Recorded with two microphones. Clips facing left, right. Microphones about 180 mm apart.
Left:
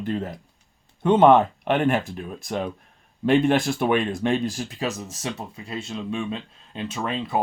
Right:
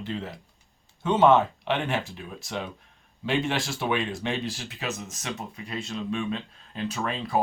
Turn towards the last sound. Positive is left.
turn(degrees=25)  # may be behind; listen again after turning